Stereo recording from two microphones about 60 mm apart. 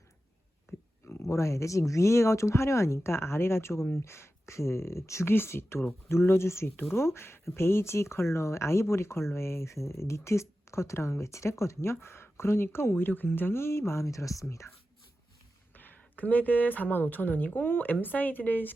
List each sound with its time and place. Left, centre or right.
0.7 s a sound: left
1.0 s speech: left
5.3 s speech: left
14.1 s speech: left
15.7 s speech: left